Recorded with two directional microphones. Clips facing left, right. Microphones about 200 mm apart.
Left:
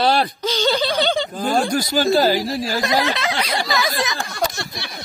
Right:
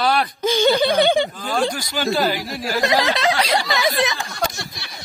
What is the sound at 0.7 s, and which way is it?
Speech, 55° right (ahead or behind).